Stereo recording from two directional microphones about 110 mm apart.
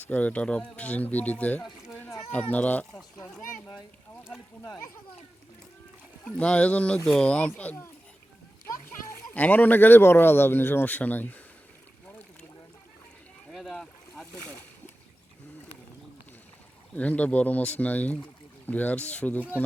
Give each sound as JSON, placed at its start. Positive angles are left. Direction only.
{"t": 0.0, "sound": "speech", "side_deg": 15}
{"t": 3.8, "sound": "boat", "side_deg": -5}
{"t": 6.2, "sound": "a child's voice", "side_deg": 10}
{"t": 13.5, "sound": "boat", "side_deg": 0}
{"t": 16.9, "sound": "speech", "side_deg": 15}